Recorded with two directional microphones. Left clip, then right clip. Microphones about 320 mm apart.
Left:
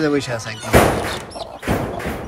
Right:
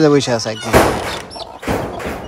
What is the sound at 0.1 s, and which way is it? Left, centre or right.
Speech, centre.